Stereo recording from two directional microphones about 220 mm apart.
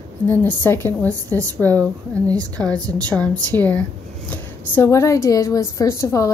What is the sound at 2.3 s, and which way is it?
Speech, 15° right (ahead or behind).